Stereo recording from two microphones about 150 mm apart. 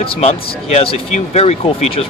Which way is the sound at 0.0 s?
40° left (ahead or behind).